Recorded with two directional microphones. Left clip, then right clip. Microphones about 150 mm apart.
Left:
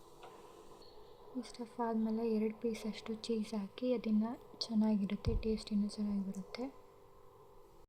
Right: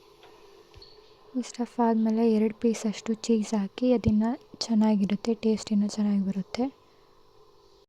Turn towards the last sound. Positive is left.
turn(degrees=-90)